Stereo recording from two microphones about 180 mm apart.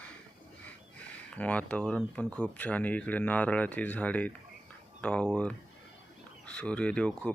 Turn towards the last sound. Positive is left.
turn(degrees=5)  # may be behind; listen again after turning